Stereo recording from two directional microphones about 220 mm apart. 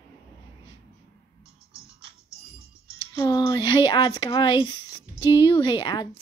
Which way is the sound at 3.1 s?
15° left (ahead or behind).